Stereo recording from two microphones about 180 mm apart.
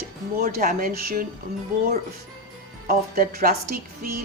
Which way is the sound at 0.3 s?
55° right (ahead or behind).